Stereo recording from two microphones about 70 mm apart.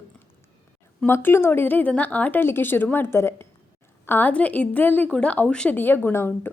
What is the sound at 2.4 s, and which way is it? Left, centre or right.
A woman's voice, left.